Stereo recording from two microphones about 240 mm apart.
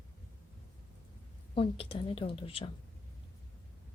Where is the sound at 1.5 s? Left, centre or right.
Left.